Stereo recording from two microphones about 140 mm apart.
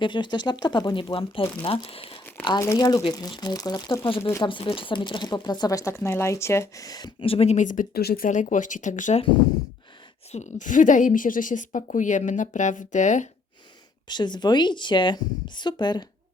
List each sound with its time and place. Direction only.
0.0 s speech: 35° left (ahead or behind)
2.6 s speech: 25° left (ahead or behind)
4.2 s speech: 20° left (ahead or behind)
4.4 s speech: 35° left (ahead or behind); by 9.2 s 60° left (ahead or behind)
10.3 s a woman's voice: 60° left (ahead or behind)
14.1 s speech: 30° left (ahead or behind)